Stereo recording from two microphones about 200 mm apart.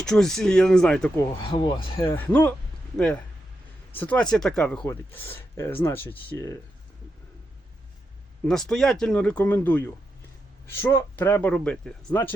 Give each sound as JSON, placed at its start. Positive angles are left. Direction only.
{"t": 0.0, "sound": "speech", "side_deg": 5}
{"t": 1.5, "sound": "speech", "side_deg": 25}
{"t": 2.1, "sound": "speech", "side_deg": 10}
{"t": 3.9, "sound": "speech", "side_deg": 10}
{"t": 8.4, "sound": "speech", "side_deg": 0}